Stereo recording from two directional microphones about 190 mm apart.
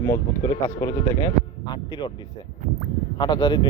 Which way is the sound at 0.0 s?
15° left (ahead or behind).